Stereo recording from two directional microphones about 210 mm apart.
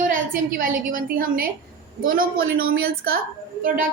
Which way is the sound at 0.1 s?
40° right (ahead or behind).